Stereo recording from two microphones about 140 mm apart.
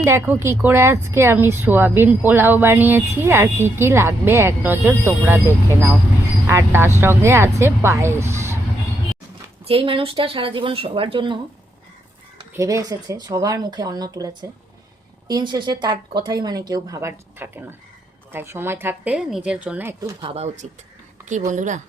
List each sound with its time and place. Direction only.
0.0 s speech: 20° right (ahead or behind)
9.6 s speech: 40° right (ahead or behind)
12.5 s speech: 25° right (ahead or behind)
15.3 s speech: 30° right (ahead or behind); by 20.0 s 10° right (ahead or behind)
20.2 s speech: 50° right (ahead or behind)
21.2 s a woman's voice: 60° right (ahead or behind)